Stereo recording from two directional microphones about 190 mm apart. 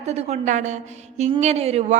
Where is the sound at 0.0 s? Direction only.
35° right (ahead or behind).